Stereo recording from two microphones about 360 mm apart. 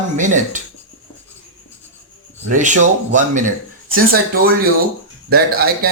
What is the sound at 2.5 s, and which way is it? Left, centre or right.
Speech, right.